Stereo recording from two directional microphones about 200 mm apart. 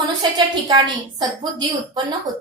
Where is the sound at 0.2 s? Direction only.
20° right (ahead or behind).